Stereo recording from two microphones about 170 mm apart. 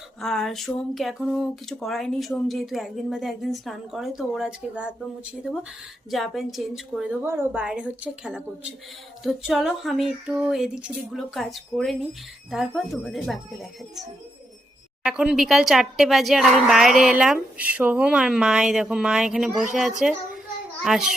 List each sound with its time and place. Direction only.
0.2 s speech: 5° left (ahead or behind)